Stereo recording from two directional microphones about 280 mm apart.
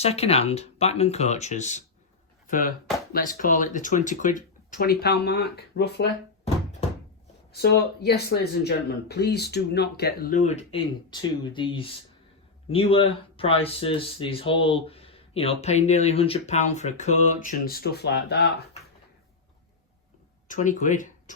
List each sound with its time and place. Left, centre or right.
0.0 s speech: left
7.5 s speech: left
20.5 s speech: left